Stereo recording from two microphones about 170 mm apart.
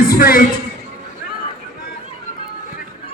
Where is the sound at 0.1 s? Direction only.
60° left (ahead or behind).